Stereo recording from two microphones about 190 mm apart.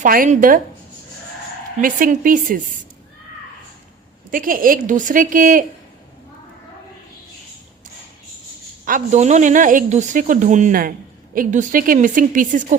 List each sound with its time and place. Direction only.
0.0 s a woman's voice: 45° right (ahead or behind)
1.8 s a woman's voice: 45° right (ahead or behind)
4.3 s a woman's voice: 45° right (ahead or behind)
8.8 s a woman's voice: 40° right (ahead or behind)